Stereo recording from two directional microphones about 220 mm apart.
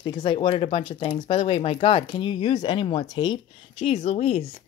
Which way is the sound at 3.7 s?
30° left (ahead or behind).